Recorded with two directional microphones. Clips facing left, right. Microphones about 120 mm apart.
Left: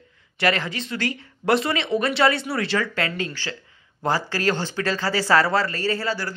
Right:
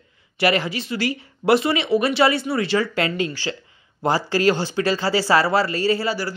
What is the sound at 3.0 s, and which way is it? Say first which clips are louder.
Speech: right 4 dB; 15° right (ahead or behind).